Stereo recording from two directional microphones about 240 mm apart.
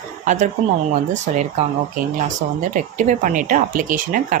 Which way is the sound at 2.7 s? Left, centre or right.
Right.